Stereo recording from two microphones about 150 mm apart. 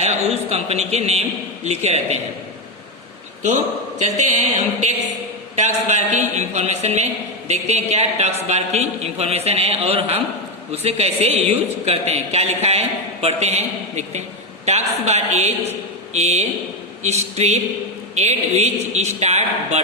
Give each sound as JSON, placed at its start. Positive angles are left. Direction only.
{"t": 0.0, "sound": "a man's voice", "side_deg": -45}
{"t": 3.4, "sound": "a man's voice", "side_deg": -55}